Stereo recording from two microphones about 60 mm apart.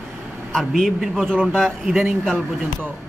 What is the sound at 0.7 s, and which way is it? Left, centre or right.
Speech, centre.